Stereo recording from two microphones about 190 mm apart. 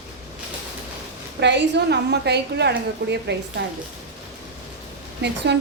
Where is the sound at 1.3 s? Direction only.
65° right (ahead or behind).